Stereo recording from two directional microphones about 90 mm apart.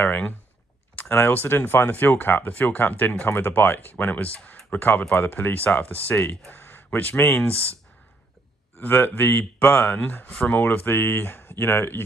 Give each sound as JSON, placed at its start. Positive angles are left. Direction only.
{"t": 0.0, "sound": "speech", "side_deg": 15}
{"t": 8.8, "sound": "speech", "side_deg": 25}